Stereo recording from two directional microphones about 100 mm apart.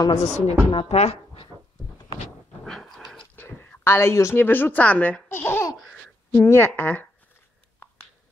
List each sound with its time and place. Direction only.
0.1 s speech: 90° left
0.7 s speech: 75° left (ahead or behind)
2.6 s dog: 5° left (ahead or behind)
3.3 s a woman's voice: 20° left (ahead or behind)
5.3 s laughter: 25° left (ahead or behind)
6.3 s a woman's voice: 25° left (ahead or behind)